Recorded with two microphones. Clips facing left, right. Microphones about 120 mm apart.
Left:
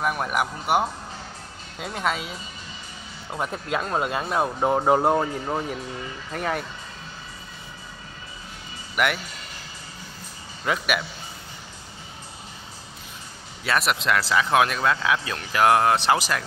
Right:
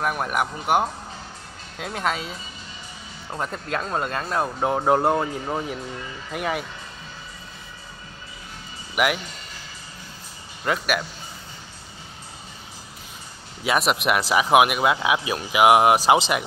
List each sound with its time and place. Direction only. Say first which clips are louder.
0.0 s speech: even; centre (ahead or behind)
8.9 s speech: right 2 dB; 5° right (ahead or behind)
10.6 s speech: right 1 dB; centre (ahead or behind)
13.7 s speech: right 2 dB; 15° right (ahead or behind)